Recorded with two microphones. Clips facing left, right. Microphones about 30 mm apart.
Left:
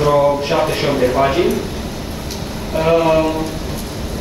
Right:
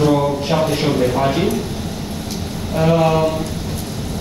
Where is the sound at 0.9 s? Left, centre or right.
Left.